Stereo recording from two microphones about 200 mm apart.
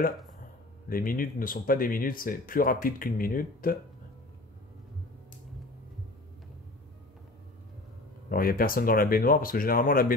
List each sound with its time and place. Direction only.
0.4 s speech: 45° left (ahead or behind)
8.3 s speech: 45° left (ahead or behind)